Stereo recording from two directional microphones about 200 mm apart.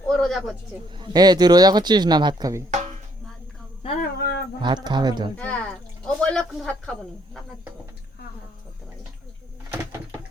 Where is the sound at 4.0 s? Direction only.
55° left (ahead or behind).